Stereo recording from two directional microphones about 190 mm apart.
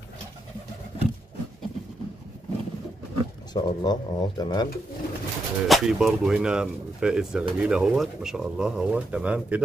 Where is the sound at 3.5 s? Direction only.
20° left (ahead or behind).